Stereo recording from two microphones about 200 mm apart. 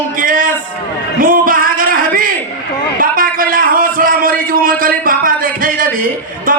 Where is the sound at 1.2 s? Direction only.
45° right (ahead or behind).